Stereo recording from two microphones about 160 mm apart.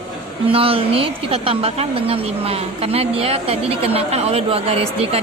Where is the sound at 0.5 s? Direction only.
35° right (ahead or behind).